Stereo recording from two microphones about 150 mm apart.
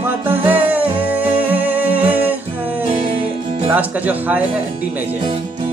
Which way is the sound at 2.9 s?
40° right (ahead or behind).